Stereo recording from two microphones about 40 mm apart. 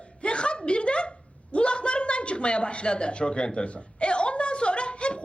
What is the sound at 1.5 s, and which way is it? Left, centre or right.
A woman's voice, left.